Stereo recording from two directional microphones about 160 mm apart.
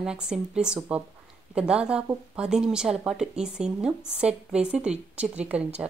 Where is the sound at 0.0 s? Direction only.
5° right (ahead or behind).